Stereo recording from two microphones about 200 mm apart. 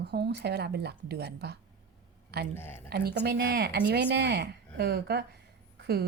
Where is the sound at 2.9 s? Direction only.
55° right (ahead or behind).